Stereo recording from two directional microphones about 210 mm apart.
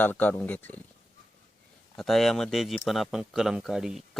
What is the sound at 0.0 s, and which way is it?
Speech, 10° left (ahead or behind).